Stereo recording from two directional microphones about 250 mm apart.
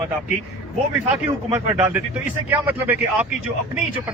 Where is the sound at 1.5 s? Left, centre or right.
Centre.